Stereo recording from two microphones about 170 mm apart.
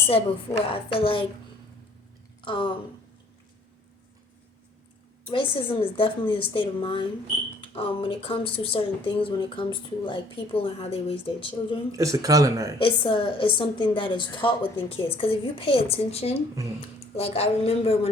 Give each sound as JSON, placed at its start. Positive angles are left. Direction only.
{"t": 0.7, "sound": "a woman's voice", "side_deg": 30}
{"t": 2.4, "sound": "speech", "side_deg": 30}
{"t": 5.3, "sound": "a woman's voice", "side_deg": 30}
{"t": 11.9, "sound": "speech", "side_deg": -20}
{"t": 12.8, "sound": "a woman's voice", "side_deg": 30}